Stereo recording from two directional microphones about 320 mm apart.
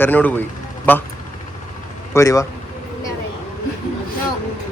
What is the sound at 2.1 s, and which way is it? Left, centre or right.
Speech, centre.